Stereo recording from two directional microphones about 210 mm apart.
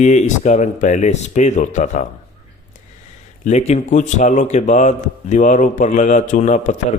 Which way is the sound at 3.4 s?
30° left (ahead or behind).